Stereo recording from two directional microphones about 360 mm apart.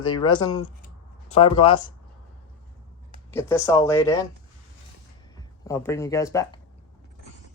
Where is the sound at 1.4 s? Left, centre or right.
Centre.